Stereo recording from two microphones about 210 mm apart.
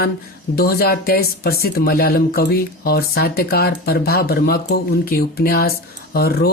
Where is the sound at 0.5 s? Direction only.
45° left (ahead or behind).